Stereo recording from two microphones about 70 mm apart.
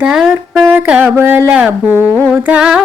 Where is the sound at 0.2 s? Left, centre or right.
Centre.